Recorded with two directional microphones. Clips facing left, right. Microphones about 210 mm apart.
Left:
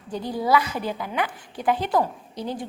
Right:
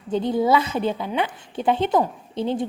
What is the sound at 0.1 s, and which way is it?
Speech, 25° right (ahead or behind).